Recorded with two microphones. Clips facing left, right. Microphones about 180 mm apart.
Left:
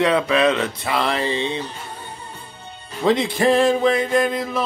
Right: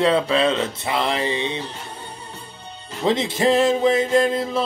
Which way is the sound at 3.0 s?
25° right (ahead or behind).